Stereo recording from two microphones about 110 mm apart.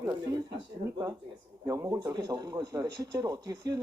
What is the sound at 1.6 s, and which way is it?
Speech, 30° right (ahead or behind).